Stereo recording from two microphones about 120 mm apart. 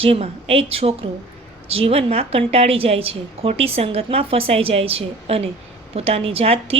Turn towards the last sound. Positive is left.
turn(degrees=-55)  # may be behind; listen again after turning